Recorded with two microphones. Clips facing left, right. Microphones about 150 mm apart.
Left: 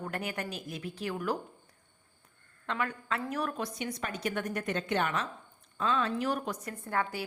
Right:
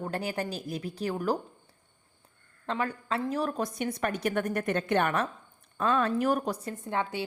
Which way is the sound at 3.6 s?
50° right (ahead or behind).